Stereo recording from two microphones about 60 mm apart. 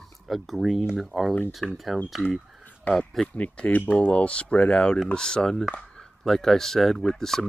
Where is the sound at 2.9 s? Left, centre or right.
Left.